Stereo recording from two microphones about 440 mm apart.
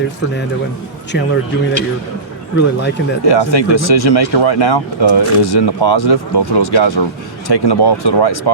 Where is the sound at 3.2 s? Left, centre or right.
Left.